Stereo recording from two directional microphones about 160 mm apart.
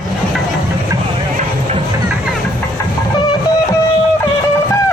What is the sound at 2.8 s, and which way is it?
Train, 20° left (ahead or behind).